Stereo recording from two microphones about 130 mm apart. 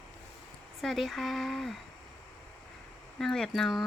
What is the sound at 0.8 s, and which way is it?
Speech, centre (ahead or behind).